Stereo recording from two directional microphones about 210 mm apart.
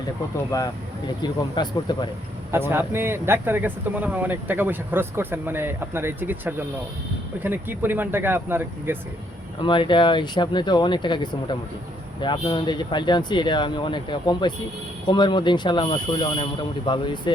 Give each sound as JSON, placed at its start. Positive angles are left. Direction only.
{"t": 0.5, "sound": "speech", "side_deg": 15}
{"t": 2.5, "sound": "speech", "side_deg": -10}
{"t": 9.6, "sound": "speech", "side_deg": 25}